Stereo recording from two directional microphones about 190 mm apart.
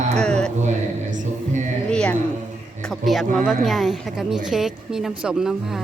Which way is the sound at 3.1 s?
Centre (ahead or behind).